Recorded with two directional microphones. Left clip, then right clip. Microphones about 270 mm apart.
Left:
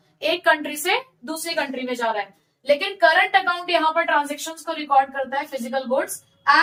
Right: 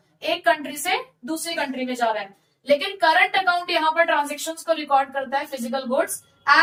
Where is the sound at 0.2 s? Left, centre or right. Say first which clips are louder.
Left 2 dB; centre.